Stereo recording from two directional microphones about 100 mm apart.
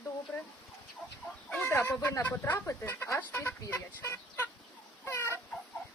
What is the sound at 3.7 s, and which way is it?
Speech, 20° left (ahead or behind).